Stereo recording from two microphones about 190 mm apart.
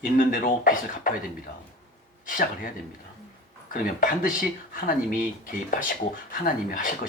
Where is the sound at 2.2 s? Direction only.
45° left (ahead or behind).